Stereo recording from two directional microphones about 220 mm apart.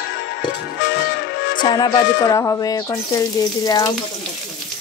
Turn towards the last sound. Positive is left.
turn(degrees=15)  # may be behind; listen again after turning